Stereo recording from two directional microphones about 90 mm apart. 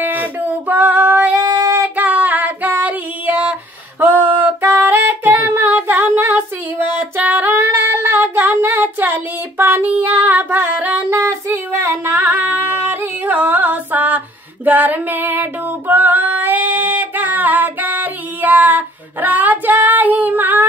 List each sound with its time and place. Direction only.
0.0 s female singing: 20° right (ahead or behind)
1.3 s female singing: 40° right (ahead or behind)
1.8 s female singing: 15° right (ahead or behind)
4.0 s music: 20° right (ahead or behind)
7.0 s female singing: 20° right (ahead or behind)
11.1 s singing: 30° right (ahead or behind)
15.9 s female singing: 20° right (ahead or behind)